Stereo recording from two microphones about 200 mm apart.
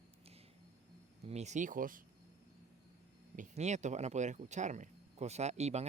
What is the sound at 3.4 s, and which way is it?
Speech, 35° right (ahead or behind).